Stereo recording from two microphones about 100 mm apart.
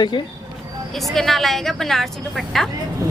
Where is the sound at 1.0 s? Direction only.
Centre (ahead or behind).